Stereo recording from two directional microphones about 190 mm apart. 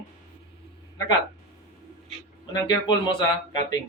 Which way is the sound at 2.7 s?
25° left (ahead or behind).